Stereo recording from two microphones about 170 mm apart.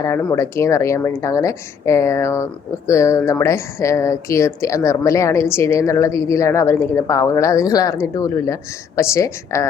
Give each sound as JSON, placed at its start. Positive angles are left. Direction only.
{"t": 0.0, "sound": "speech", "side_deg": 15}